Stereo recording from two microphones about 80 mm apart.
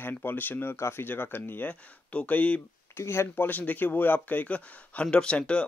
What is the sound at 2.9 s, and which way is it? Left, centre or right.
Speech, left.